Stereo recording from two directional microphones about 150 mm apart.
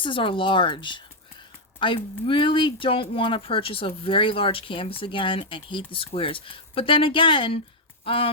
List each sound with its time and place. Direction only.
0.0 s speech: 35° left (ahead or behind)